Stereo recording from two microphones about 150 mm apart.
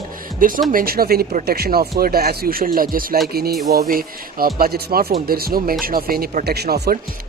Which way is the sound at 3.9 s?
75° right (ahead or behind).